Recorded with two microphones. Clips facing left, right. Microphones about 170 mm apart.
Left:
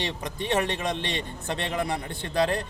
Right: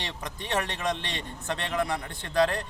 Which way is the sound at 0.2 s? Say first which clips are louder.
Left 3 dB; 25° left (ahead or behind).